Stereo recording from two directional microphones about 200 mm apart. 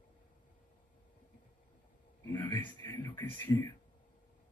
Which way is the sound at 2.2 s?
10° left (ahead or behind).